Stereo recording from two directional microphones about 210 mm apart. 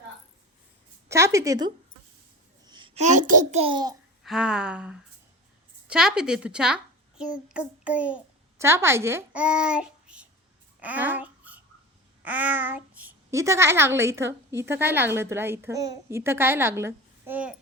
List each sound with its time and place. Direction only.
1.0 s a woman's voice: 15° right (ahead or behind)
4.2 s a child's voice: centre (ahead or behind)
10.8 s babbling: 5° right (ahead or behind)
12.2 s a woman's voice: 5° right (ahead or behind)